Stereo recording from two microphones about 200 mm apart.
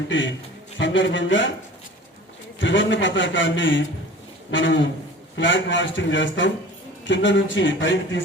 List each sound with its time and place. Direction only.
0.8 s a man's voice: 65° left (ahead or behind)
2.6 s a man's voice: 65° left (ahead or behind)